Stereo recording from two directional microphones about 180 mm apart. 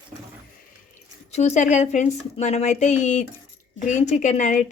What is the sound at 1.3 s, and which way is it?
A woman's voice, 40° left (ahead or behind).